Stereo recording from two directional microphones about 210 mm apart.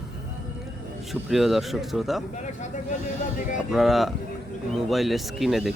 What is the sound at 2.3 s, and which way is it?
Speech, 35° left (ahead or behind).